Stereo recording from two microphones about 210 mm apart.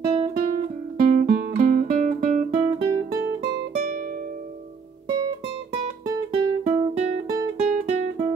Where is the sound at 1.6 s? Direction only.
40° right (ahead or behind).